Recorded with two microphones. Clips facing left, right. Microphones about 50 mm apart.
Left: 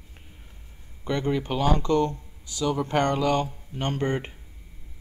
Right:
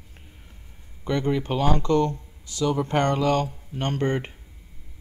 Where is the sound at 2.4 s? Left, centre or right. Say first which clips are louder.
Right 2 dB; right.